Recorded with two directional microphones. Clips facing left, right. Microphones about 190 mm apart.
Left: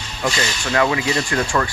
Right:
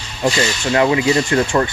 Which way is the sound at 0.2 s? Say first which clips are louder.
Right 5 dB; 25° right (ahead or behind).